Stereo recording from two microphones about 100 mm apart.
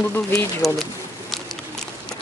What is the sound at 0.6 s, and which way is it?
Pigeon, centre (ahead or behind).